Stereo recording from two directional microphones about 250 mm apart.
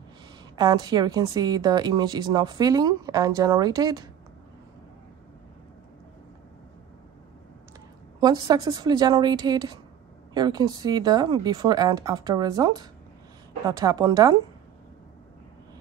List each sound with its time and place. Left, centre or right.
0.6 s a woman's voice: centre
8.2 s a woman's voice: centre